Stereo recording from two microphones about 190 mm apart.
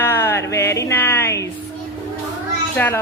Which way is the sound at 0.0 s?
10° left (ahead or behind).